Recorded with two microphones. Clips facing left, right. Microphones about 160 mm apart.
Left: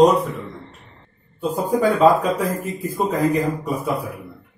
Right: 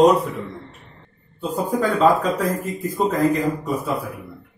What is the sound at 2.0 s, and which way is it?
Speech, 10° left (ahead or behind).